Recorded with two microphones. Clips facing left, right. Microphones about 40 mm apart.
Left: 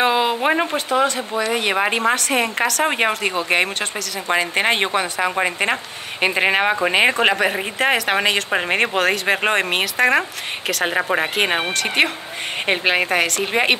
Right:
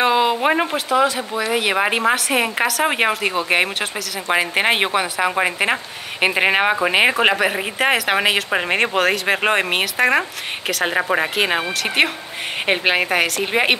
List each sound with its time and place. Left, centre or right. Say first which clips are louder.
0.0 s speech: right 1 dB; centre